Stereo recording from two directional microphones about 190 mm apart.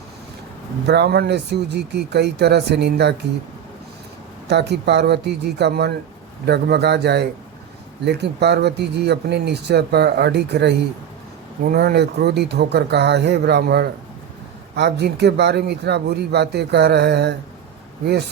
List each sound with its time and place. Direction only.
0.9 s speech: 60° right (ahead or behind)
4.4 s speech: 65° right (ahead or behind)